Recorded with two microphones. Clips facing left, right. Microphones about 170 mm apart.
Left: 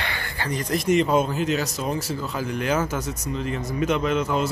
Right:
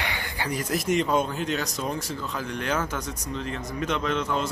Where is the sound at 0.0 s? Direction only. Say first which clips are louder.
Left 1 dB; 15° right (ahead or behind).